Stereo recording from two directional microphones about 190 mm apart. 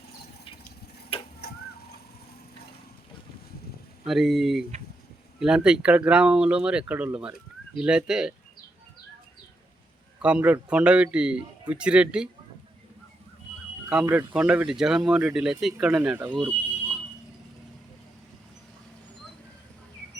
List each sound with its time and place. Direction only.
1.1 s a sound: 30° left (ahead or behind)
4.0 s speech: centre (ahead or behind)
10.2 s speech: 5° right (ahead or behind)
13.9 s speech: 10° right (ahead or behind)